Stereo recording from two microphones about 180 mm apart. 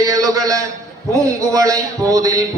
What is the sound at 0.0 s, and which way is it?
A man's voice, 20° right (ahead or behind).